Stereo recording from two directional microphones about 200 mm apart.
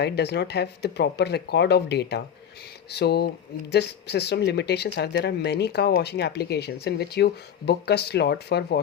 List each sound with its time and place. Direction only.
0.0 s speech: 55° left (ahead or behind)